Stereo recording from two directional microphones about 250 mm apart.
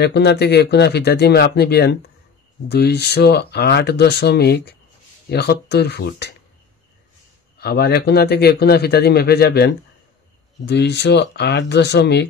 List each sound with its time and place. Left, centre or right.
0.0 s a man's voice: left
7.5 s a man's voice: left